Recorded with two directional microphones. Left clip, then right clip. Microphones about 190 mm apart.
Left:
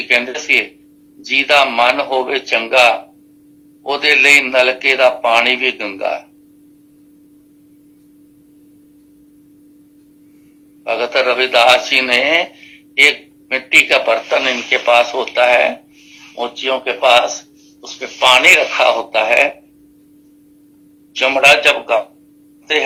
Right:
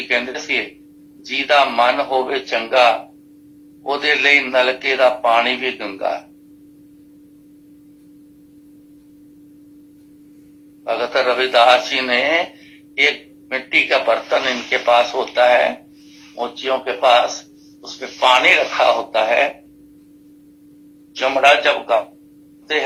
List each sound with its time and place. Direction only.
0.0 s speech: 30° left (ahead or behind)
10.8 s speech: 30° left (ahead or behind)
21.1 s speech: 30° left (ahead or behind)